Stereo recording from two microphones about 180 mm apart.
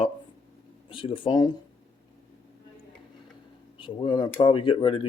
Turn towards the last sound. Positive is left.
turn(degrees=30)  # may be behind; listen again after turning